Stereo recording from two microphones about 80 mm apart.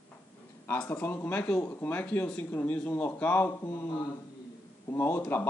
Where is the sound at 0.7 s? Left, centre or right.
Left.